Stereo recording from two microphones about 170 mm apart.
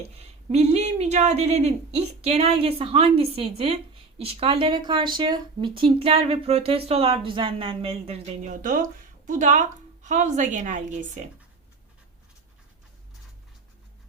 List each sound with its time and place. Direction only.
0.0 s speech: 35° right (ahead or behind)
8.6 s a woman's voice: 50° right (ahead or behind)